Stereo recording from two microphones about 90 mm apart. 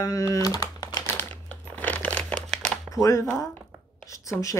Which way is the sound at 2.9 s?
35° left (ahead or behind).